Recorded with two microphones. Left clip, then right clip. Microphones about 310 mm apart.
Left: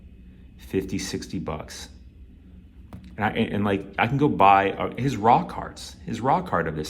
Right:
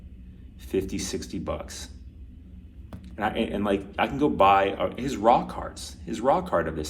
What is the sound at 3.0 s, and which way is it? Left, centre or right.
Speech, left.